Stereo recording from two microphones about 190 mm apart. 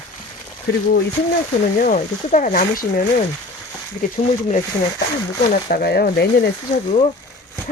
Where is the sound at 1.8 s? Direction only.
45° left (ahead or behind).